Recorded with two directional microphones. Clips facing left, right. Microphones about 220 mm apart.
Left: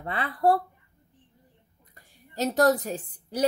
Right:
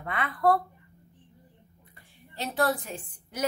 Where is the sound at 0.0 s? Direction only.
30° left (ahead or behind).